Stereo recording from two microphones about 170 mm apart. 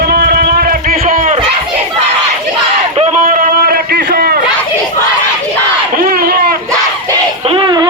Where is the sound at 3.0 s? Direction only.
50° right (ahead or behind).